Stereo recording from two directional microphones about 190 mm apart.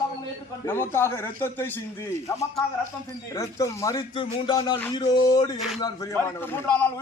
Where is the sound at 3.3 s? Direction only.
15° left (ahead or behind).